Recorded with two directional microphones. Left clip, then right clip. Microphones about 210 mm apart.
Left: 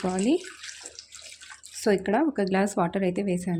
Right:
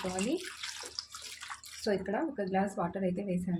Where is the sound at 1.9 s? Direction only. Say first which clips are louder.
Left 9 dB; 50° left (ahead or behind).